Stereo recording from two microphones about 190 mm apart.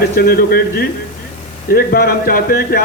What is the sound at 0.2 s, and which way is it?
A man's voice, 50° left (ahead or behind).